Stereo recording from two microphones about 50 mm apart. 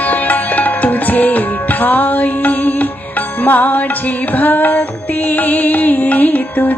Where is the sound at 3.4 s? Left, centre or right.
Left.